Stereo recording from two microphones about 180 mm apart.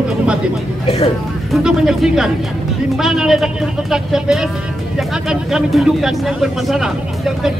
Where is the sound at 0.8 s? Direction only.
35° left (ahead or behind).